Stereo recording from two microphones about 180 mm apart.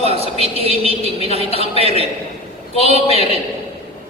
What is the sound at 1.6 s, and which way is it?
A man's voice, 35° left (ahead or behind).